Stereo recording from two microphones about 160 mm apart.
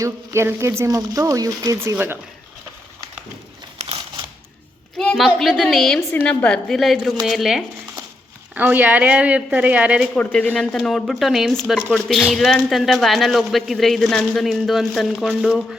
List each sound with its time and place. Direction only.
0.0 s speech: 15° right (ahead or behind)
4.9 s a man's voice: centre (ahead or behind)
10.2 s a man's voice: 10° left (ahead or behind)